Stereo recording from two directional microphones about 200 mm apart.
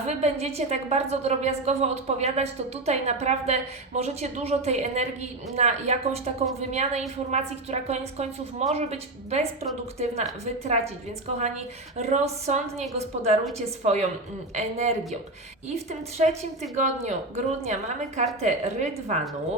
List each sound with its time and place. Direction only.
0.0 s a woman's voice: 35° right (ahead or behind)
11.9 s a woman's voice: 35° right (ahead or behind)